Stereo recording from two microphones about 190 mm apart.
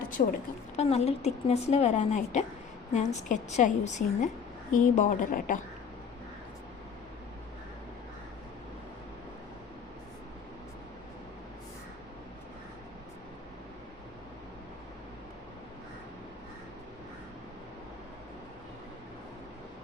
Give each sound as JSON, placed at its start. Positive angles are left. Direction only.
{"t": 0.2, "sound": "a woman's voice", "side_deg": 40}